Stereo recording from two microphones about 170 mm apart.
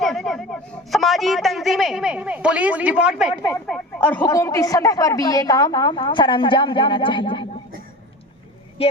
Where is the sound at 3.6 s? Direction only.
5° left (ahead or behind); by 7.5 s 30° left (ahead or behind).